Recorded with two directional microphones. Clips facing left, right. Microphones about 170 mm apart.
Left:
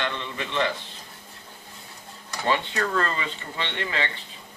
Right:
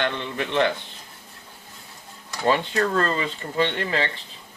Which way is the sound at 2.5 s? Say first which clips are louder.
Right 4 dB; 35° right (ahead or behind).